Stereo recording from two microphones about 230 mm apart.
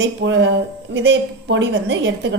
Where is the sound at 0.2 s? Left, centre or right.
Right.